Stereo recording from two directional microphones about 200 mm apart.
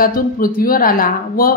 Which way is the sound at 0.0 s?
45° left (ahead or behind).